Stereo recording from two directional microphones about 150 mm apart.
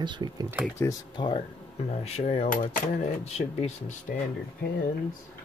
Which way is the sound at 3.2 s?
45° left (ahead or behind).